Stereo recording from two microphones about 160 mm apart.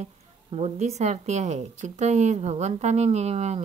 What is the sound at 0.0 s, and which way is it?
A woman's voice, 40° right (ahead or behind).